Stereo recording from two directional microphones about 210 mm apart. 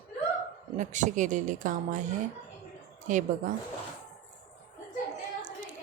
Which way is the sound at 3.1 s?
40° right (ahead or behind).